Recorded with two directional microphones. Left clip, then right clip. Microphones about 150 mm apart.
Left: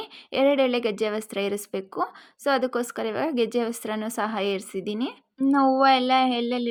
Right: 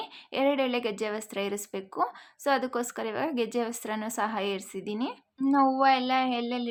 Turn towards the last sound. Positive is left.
turn(degrees=30)  # may be behind; listen again after turning